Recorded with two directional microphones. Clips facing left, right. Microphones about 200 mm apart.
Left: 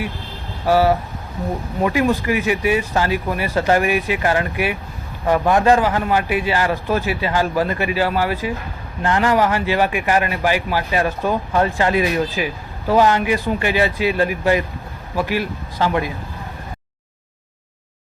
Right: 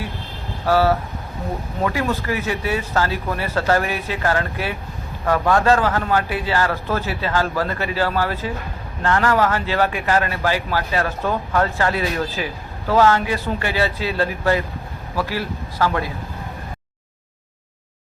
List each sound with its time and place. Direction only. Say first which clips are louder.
0.6 s a man's voice: left 2 dB; 15° left (ahead or behind)